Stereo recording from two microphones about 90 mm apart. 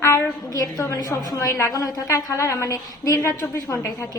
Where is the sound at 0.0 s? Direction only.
40° left (ahead or behind).